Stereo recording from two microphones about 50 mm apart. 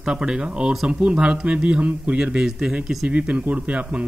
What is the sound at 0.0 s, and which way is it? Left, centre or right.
A man's voice, centre.